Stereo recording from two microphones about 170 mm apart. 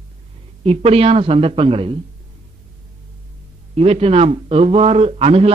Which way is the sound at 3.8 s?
35° right (ahead or behind).